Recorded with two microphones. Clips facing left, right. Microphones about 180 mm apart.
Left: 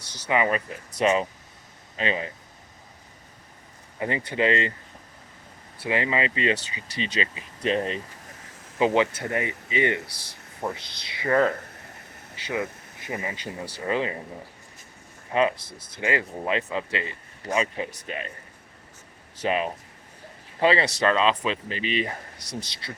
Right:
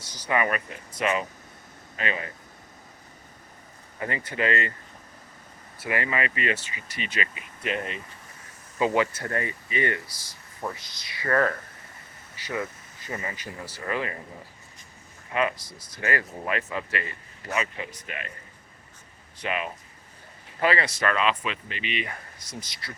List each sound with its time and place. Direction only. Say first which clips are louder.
0.3 s speech: left 2 dB; 20° left (ahead or behind)
4.0 s speech: left 4 dB; 25° left (ahead or behind)
5.9 s speech: left 3 dB; 25° left (ahead or behind)
10.1 s speech: left 3 dB; 65° left (ahead or behind)
10.6 s speech: left 3 dB; 20° left (ahead or behind)
13.3 s speech: left 4 dB; 25° left (ahead or behind)
15.3 s speech: left 4 dB; 30° left (ahead or behind)
19.4 s speech: left 5 dB; 35° left (ahead or behind)
22.4 s speech: left 5 dB; 70° left (ahead or behind)